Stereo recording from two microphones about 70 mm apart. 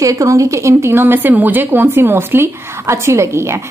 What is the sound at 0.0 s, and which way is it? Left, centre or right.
Speech, right.